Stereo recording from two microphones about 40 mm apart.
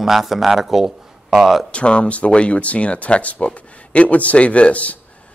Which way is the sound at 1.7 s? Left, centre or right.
Left.